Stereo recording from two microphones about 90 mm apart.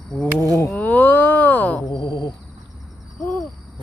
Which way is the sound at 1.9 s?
70° left (ahead or behind).